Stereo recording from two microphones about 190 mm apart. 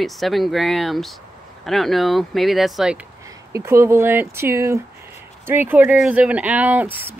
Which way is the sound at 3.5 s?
15° right (ahead or behind).